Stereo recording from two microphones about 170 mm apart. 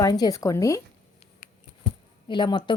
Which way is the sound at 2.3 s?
25° left (ahead or behind).